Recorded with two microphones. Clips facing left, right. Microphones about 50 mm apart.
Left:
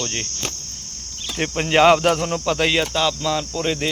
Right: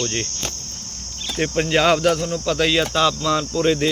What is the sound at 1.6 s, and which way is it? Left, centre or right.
Speech, left.